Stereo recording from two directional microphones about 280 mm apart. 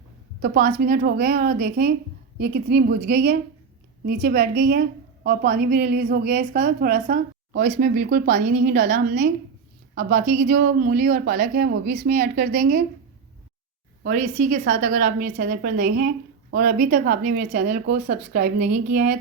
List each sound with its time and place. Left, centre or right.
0.4 s a woman's voice: right
14.0 s a woman's voice: right